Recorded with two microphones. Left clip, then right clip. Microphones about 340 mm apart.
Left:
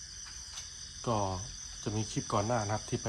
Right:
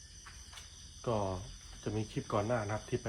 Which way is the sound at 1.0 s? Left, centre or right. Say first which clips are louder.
Left 2 dB; centre.